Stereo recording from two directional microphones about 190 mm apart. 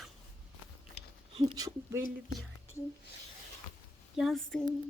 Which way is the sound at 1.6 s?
15° right (ahead or behind).